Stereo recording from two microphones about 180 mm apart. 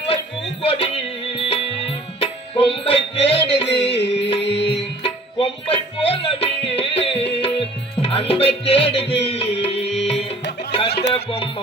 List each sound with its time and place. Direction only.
0.6 s music: 30° left (ahead or behind)
4.0 s music: 70° left (ahead or behind)
4.3 s music: 30° left (ahead or behind)